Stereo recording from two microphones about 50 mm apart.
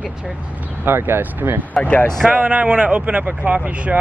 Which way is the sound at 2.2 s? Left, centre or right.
Centre.